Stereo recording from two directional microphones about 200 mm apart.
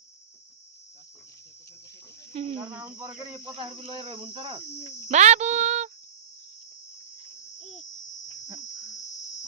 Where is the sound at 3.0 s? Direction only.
10° right (ahead or behind).